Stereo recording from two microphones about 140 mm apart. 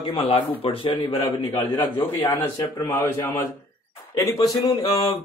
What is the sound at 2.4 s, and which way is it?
Speech, 25° left (ahead or behind).